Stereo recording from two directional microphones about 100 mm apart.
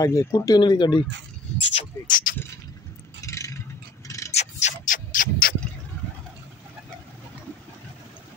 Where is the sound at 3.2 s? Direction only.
30° left (ahead or behind).